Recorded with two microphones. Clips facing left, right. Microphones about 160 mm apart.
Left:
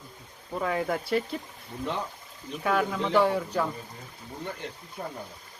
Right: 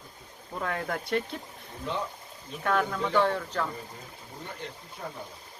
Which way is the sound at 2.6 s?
5° left (ahead or behind).